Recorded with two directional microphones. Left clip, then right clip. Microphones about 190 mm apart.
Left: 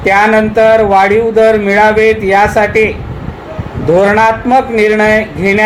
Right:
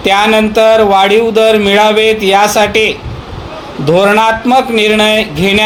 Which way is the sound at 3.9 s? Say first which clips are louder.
Even; 45° right (ahead or behind).